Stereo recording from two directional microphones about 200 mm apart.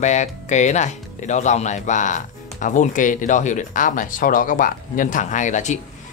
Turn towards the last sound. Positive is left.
turn(degrees=35)  # may be behind; listen again after turning